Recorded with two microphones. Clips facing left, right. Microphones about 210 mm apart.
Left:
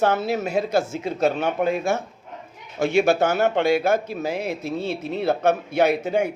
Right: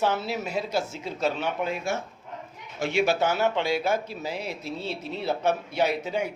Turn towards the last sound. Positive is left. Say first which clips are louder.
# left 6 dB
turn(degrees=50)  # may be behind; listen again after turning